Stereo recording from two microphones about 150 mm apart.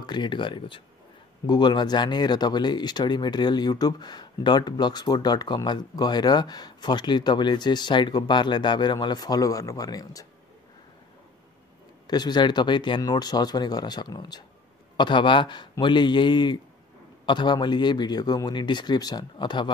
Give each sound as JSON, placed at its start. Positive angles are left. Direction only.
{"t": 0.0, "sound": "speech", "side_deg": 30}
{"t": 12.1, "sound": "speech", "side_deg": 30}